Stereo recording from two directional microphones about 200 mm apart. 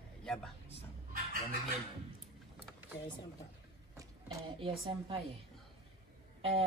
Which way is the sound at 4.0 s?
15° right (ahead or behind).